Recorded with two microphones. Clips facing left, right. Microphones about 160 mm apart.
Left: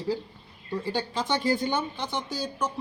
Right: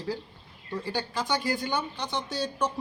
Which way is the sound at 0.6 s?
15° left (ahead or behind).